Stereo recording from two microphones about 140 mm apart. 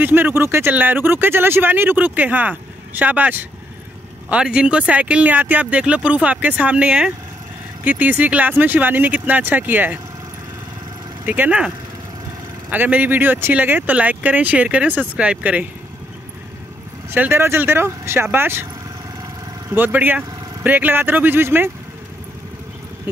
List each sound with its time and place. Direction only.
0.0 s speech: 15° right (ahead or behind)
11.2 s speech: 10° right (ahead or behind)
17.1 s speech: 15° right (ahead or behind)
19.7 s speech: 15° right (ahead or behind)